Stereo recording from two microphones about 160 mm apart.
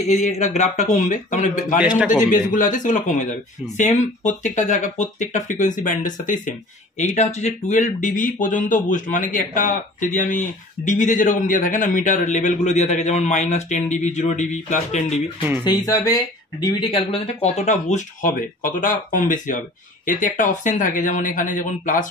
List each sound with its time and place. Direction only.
0.1 s speech: 45° left (ahead or behind)
1.8 s a man's voice: 5° right (ahead or behind)
2.3 s speech: 55° left (ahead or behind)
15.6 s speech: 25° left (ahead or behind)
16.9 s speech: 35° left (ahead or behind); by 22.0 s 55° left (ahead or behind)